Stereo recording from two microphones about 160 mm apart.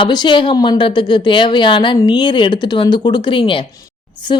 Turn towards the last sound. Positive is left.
turn(degrees=30)  # may be behind; listen again after turning